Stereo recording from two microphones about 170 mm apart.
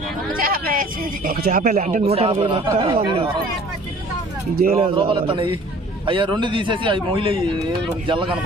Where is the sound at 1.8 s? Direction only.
40° right (ahead or behind).